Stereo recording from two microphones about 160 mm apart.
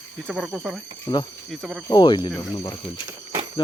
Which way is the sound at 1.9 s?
30° left (ahead or behind).